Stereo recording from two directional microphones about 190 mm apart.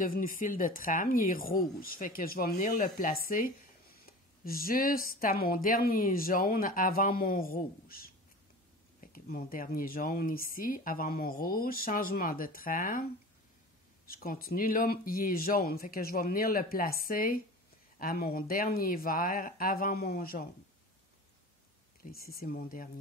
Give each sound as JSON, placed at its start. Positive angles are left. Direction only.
{"t": 0.0, "sound": "speech", "side_deg": 45}
{"t": 14.0, "sound": "speech", "side_deg": 50}
{"t": 22.0, "sound": "speech", "side_deg": 50}